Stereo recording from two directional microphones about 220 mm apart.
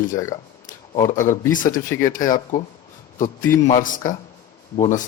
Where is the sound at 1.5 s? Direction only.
35° left (ahead or behind).